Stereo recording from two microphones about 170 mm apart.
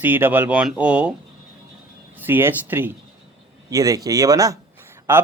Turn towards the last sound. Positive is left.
turn(degrees=-15)  # may be behind; listen again after turning